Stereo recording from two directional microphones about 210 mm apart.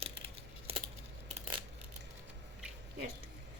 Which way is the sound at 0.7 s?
25° right (ahead or behind).